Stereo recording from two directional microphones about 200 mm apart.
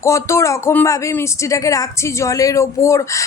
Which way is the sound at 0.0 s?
15° left (ahead or behind).